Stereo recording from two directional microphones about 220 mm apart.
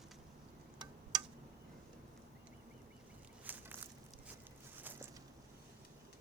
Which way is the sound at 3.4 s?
10° right (ahead or behind).